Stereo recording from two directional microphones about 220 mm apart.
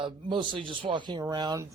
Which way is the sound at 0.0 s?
20° right (ahead or behind).